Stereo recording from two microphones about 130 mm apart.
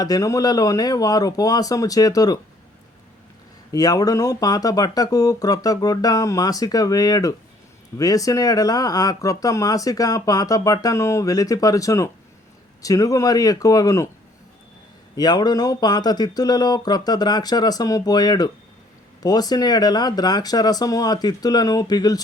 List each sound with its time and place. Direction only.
0.0 s speech: 25° left (ahead or behind)
3.7 s speech: 30° left (ahead or behind)
15.1 s speech: 30° left (ahead or behind)